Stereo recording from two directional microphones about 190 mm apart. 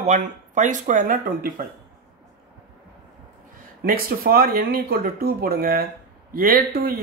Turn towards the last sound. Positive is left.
turn(degrees=-50)  # may be behind; listen again after turning